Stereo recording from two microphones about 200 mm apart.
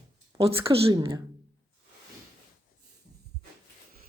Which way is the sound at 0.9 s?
20° right (ahead or behind).